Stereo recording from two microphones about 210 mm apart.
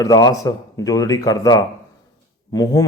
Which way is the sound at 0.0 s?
15° left (ahead or behind).